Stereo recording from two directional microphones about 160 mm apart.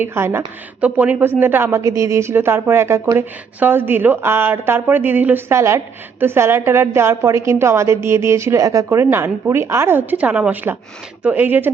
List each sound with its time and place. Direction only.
0.0 s a woman's voice: 15° right (ahead or behind)